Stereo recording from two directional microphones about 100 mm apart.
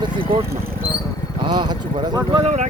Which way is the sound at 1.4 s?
45° right (ahead or behind).